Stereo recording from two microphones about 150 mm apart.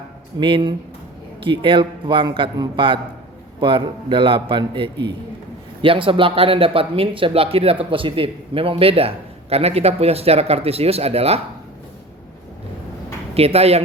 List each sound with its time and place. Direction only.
0.3 s speech: 35° right (ahead or behind)
13.3 s speech: 40° right (ahead or behind)